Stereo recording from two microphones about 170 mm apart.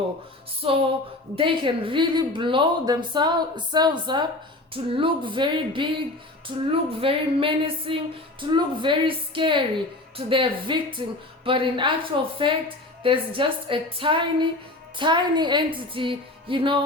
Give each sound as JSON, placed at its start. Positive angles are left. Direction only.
{"t": 0.6, "sound": "a woman's voice", "side_deg": -35}